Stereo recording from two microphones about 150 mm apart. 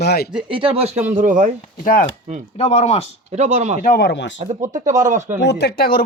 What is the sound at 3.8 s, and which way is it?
Speech, 85° left.